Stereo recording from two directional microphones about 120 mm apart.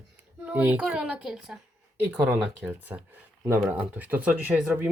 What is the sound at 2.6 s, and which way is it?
Speech, 15° right (ahead or behind).